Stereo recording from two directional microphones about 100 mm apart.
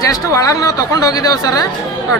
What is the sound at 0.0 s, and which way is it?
Speech, 35° left (ahead or behind).